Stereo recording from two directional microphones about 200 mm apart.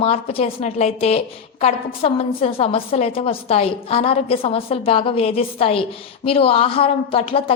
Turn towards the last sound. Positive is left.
turn(degrees=30)  # may be behind; listen again after turning